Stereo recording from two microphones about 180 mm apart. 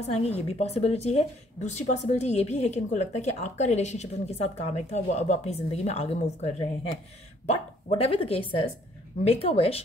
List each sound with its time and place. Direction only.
0.0 s a woman's voice: 35° left (ahead or behind)